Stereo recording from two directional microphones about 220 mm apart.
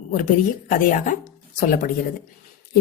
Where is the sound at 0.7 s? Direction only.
35° left (ahead or behind).